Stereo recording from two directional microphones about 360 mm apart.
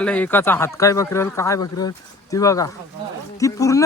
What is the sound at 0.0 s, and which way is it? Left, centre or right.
Speech, centre.